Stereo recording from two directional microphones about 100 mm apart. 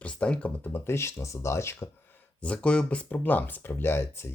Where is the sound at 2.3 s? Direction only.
10° left (ahead or behind).